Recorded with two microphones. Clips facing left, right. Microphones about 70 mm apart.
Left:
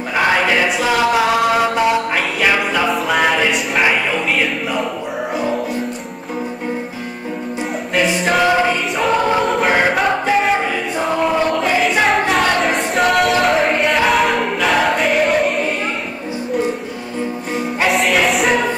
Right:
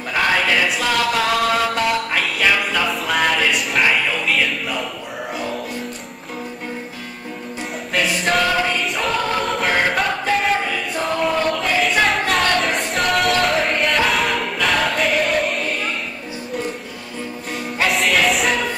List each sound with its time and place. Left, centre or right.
0.1 s chant: centre
2.9 s music: centre
3.8 s music: centre
4.3 s music: centre
7.9 s music: centre
8.5 s music: centre
8.9 s choir: centre
9.7 s choir: centre
9.9 s music: centre
11.0 s choir: centre
17.7 s music: centre